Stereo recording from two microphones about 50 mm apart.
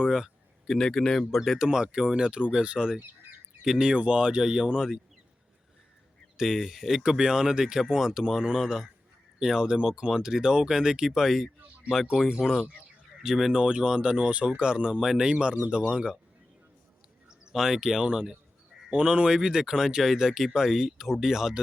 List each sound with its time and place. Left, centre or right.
0.0 s speech: centre
0.7 s speech: centre
1.5 s speech: centre
6.3 s speech: centre
13.6 s speech: centre
17.2 s speech: centre